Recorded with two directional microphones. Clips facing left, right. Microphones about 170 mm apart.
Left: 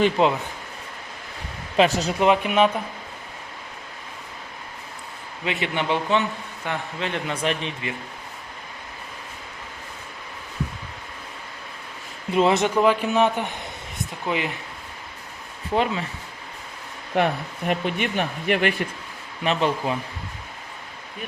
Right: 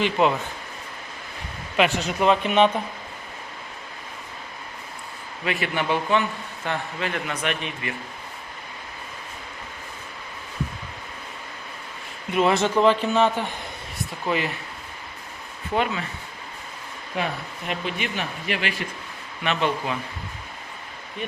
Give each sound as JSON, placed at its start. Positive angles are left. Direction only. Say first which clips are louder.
{"t": 0.2, "sound": "a man's voice", "louder": "right 2 dB", "side_deg": 25}
{"t": 1.7, "sound": "speech", "louder": "left 3 dB", "side_deg": 35}
{"t": 2.1, "sound": "a man's voice", "louder": "right 1 dB", "side_deg": 15}
{"t": 5.5, "sound": "a man's voice", "louder": "even", "side_deg": 20}
{"t": 12.3, "sound": "a man's voice", "louder": "left 1 dB", "side_deg": 25}
{"t": 17.2, "sound": "speech", "louder": "left 6 dB", "side_deg": 65}
{"t": 19.4, "sound": "speech", "louder": "left 2 dB", "side_deg": 35}